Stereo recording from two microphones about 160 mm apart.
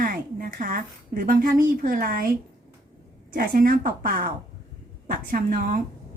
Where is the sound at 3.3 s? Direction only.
60° right (ahead or behind).